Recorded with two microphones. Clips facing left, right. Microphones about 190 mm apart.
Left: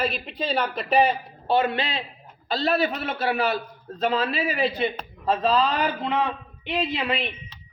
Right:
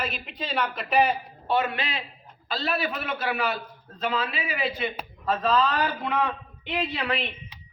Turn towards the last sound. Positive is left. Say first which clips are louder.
# left 2 dB
turn(degrees=20)  # may be behind; listen again after turning